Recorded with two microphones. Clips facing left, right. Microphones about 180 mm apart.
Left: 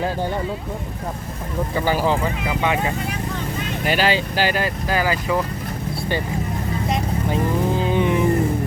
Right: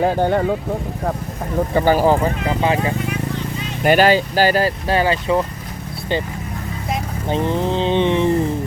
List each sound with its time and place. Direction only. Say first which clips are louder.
0.0 s speech: right 7 dB; 60° right (ahead or behind)
1.7 s speech: right 5 dB; 50° right (ahead or behind)
3.8 s speech: right 7 dB; 50° right (ahead or behind); by 5.4 s 25° right (ahead or behind)
7.3 s a sound: right 3 dB; 30° right (ahead or behind)